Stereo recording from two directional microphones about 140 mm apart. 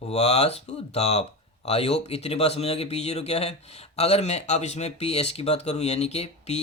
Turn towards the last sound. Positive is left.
turn(degrees=50)  # may be behind; listen again after turning